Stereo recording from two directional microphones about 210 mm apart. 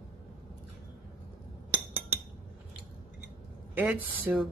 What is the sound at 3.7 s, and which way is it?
Speech, 5° right (ahead or behind).